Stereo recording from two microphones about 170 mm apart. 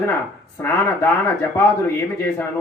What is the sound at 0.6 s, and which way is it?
A man's voice, 15° left (ahead or behind).